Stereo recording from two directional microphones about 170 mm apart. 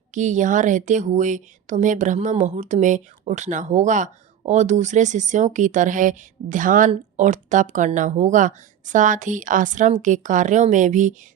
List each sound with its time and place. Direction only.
0.1 s speech: 45° right (ahead or behind)